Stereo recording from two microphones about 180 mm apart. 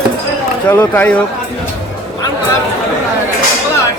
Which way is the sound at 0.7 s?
10° left (ahead or behind).